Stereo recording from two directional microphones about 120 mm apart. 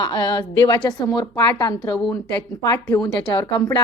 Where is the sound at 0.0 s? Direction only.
35° left (ahead or behind).